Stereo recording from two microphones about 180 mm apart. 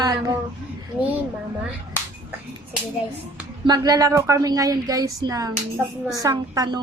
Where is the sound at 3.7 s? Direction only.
20° right (ahead or behind).